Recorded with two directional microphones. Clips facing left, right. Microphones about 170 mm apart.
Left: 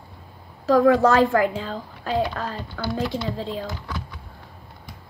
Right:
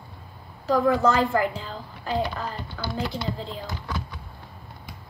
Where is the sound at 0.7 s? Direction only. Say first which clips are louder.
Left 5 dB; 75° left (ahead or behind).